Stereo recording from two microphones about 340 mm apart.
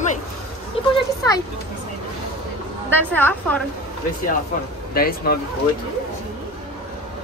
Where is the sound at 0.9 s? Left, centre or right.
Centre.